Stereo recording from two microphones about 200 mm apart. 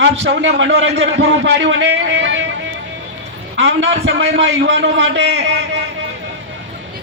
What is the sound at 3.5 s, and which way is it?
A man's voice, 70° right (ahead or behind).